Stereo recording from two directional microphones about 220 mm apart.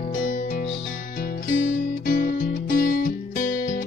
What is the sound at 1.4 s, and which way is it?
Music, 40° left (ahead or behind).